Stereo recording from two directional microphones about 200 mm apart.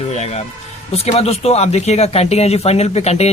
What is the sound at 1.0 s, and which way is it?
Speech, 30° left (ahead or behind).